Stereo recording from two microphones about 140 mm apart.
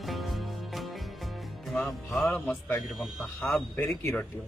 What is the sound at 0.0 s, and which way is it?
Music, centre (ahead or behind).